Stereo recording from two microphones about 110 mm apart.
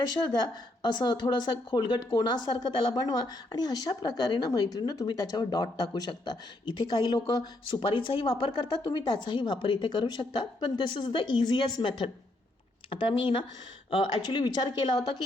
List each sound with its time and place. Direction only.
0.1 s a woman's voice: 40° left (ahead or behind)